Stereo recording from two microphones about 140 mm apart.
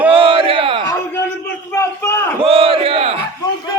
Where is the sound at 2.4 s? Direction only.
40° right (ahead or behind).